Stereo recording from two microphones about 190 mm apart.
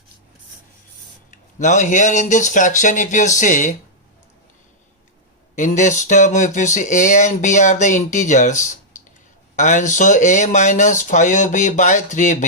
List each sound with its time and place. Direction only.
1.3 s speech: 40° left (ahead or behind)
5.5 s speech: 40° left (ahead or behind)